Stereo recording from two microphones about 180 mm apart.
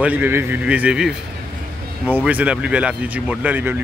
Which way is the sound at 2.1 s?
10° right (ahead or behind).